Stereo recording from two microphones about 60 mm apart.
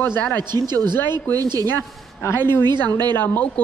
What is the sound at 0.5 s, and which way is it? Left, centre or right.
Speech, right.